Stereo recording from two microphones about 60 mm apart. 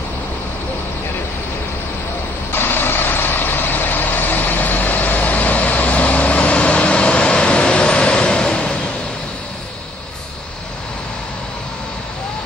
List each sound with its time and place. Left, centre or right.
2.5 s vehicle: left; by 8.7 s centre